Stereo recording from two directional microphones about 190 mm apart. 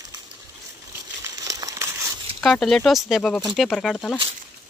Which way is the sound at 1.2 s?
20° right (ahead or behind).